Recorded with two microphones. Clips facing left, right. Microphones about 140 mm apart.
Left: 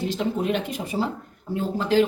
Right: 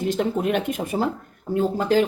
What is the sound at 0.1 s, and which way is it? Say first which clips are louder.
Speech: right 5 dB; 50° right (ahead or behind).